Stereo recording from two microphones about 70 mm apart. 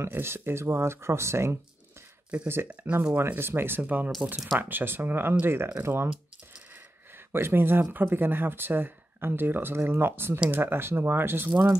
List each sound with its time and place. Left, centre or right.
0.0 s speech: right
2.7 s speech: right
3.2 s speech: right
6.7 s a sound: right
7.9 s speech: right